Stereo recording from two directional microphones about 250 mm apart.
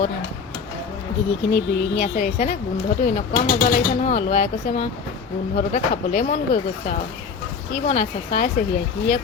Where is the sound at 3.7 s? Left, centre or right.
Left.